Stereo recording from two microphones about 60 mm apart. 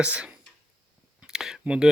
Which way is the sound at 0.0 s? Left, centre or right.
Right.